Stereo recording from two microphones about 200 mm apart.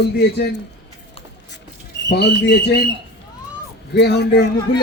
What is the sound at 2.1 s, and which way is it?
Speech, 55° left (ahead or behind).